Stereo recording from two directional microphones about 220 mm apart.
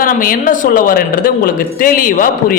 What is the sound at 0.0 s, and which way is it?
A man's voice, 40° left (ahead or behind).